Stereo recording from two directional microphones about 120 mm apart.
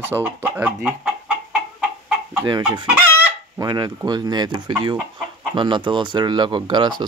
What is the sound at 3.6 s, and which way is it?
Speech, 35° right (ahead or behind).